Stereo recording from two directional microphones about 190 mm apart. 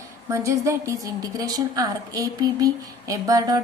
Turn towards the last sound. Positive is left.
turn(degrees=-20)  # may be behind; listen again after turning